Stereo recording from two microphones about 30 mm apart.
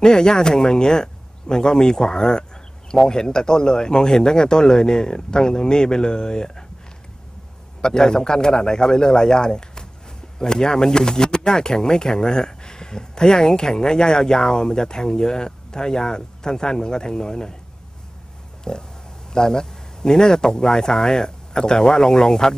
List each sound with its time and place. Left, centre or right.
0.0 s speech: left
7.8 s speech: left
18.6 s a sound: left
19.3 s speech: centre